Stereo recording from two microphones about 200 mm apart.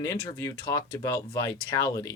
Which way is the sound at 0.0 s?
15° left (ahead or behind).